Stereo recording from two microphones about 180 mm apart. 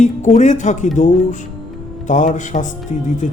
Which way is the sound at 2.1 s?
45° left (ahead or behind).